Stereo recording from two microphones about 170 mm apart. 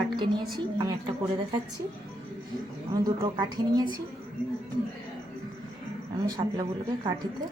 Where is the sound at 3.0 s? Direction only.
25° right (ahead or behind).